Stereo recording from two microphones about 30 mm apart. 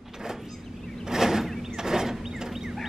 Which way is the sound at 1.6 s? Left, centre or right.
Centre.